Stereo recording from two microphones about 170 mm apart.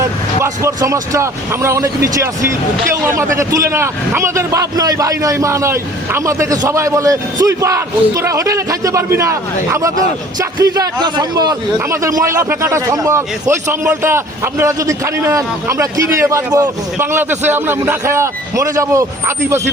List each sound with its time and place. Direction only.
0.0 s a man's voice: 15° right (ahead or behind)